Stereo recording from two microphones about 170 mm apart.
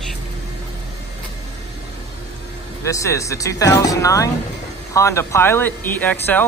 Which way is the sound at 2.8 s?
20° left (ahead or behind).